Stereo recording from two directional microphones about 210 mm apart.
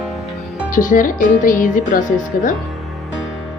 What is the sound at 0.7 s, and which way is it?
Speech, 40° left (ahead or behind).